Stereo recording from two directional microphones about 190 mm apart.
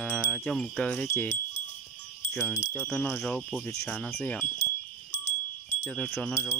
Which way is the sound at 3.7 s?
10° left (ahead or behind).